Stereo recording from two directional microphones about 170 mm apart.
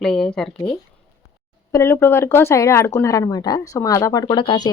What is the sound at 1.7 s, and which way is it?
Speech, 15° left (ahead or behind).